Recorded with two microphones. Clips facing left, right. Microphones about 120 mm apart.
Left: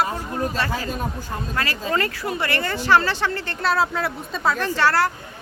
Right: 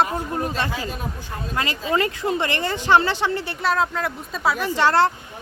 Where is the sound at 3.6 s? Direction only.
5° left (ahead or behind); by 5.1 s 20° right (ahead or behind).